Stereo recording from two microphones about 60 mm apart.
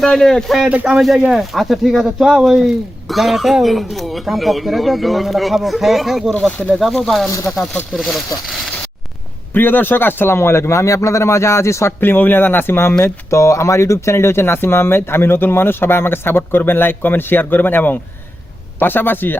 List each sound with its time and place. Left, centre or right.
0.0 s speech: centre
9.6 s a man's voice: left
11.9 s speech: left
13.3 s speech: left